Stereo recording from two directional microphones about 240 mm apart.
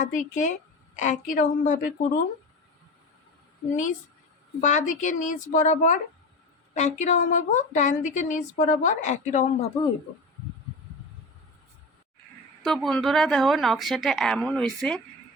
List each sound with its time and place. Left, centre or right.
0.0 s a woman's voice: left
3.7 s a woman's voice: left
12.6 s speech: centre